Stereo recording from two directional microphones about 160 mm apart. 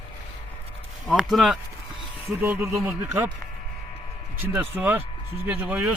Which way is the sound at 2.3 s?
15° right (ahead or behind).